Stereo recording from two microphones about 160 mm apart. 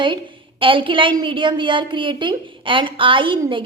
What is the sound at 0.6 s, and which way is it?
A woman's voice, 30° right (ahead or behind).